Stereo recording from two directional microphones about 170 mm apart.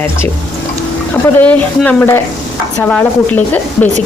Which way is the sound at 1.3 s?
10° left (ahead or behind).